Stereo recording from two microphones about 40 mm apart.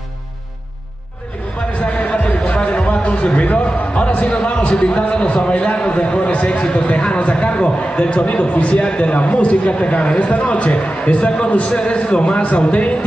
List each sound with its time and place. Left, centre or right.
1.8 s music: left
2.1 s a sound: left
4.1 s a man's voice: left